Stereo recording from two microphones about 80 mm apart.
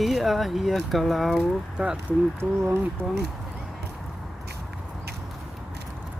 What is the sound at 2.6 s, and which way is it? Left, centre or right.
Speech, right.